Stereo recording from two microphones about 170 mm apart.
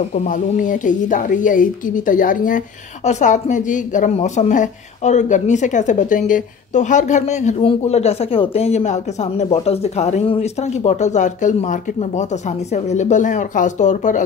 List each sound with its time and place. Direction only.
0.1 s a woman's voice: 50° left (ahead or behind)